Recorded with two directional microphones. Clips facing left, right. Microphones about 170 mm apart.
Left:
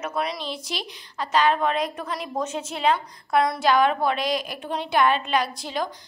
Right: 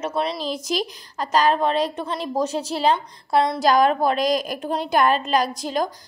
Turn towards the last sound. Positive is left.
turn(degrees=-45)  # may be behind; listen again after turning